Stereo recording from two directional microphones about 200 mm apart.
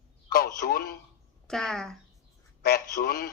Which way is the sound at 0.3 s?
50° left (ahead or behind).